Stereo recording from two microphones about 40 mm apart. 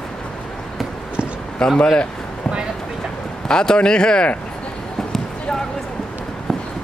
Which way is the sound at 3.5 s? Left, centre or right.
Left.